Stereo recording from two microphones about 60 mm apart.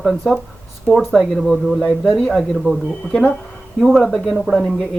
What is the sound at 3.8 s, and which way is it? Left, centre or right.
Speech, centre.